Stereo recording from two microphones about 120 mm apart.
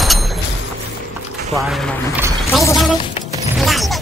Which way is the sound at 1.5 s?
Centre (ahead or behind).